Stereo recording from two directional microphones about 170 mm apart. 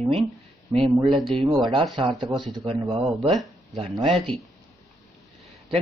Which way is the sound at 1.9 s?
30° right (ahead or behind).